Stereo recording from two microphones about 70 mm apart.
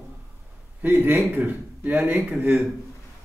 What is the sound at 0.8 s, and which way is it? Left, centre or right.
A man's voice, right.